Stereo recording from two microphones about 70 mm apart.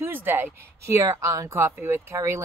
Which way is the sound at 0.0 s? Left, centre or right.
Right.